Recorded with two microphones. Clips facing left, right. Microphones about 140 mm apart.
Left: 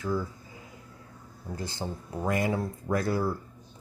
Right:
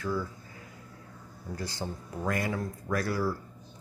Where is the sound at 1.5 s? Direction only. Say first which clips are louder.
Left 1 dB; 20° left (ahead or behind).